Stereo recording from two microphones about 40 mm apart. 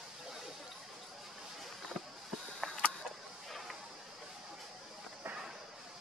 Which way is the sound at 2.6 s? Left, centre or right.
Centre.